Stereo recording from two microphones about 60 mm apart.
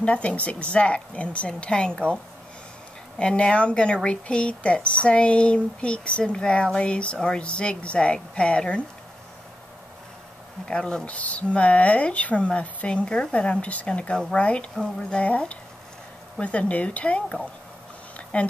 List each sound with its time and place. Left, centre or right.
0.0 s speech: centre
3.2 s speech: centre
10.6 s speech: centre
18.1 s a sound: left